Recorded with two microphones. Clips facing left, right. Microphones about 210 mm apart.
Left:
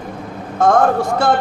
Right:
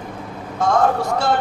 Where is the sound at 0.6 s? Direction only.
55° left (ahead or behind).